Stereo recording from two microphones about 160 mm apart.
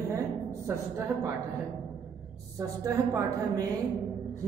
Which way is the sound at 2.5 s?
20° right (ahead or behind).